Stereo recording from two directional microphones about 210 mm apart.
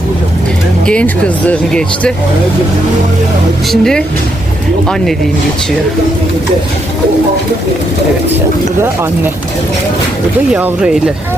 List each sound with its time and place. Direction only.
0.9 s speech: 5° left (ahead or behind)
3.7 s speech: centre (ahead or behind)
10.5 s speech: 5° right (ahead or behind)